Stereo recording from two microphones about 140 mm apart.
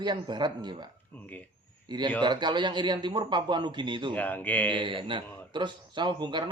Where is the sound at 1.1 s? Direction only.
10° left (ahead or behind).